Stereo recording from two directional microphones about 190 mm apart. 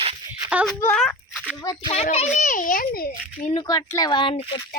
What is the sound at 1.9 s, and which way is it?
A child's voice, 35° left (ahead or behind).